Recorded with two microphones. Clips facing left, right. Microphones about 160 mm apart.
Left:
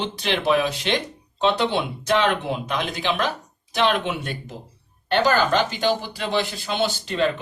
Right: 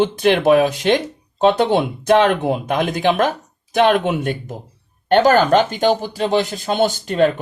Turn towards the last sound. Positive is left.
turn(degrees=-45)  # may be behind; listen again after turning